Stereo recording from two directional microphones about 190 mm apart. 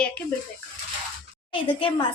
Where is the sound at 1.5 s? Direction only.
25° left (ahead or behind).